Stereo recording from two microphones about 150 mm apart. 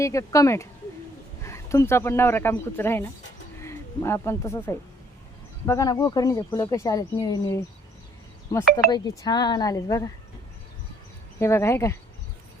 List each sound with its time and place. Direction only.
0.0 s speech: 20° left (ahead or behind)
11.3 s speech: 20° left (ahead or behind)